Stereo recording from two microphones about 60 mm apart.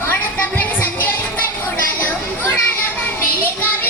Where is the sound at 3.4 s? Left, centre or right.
Left.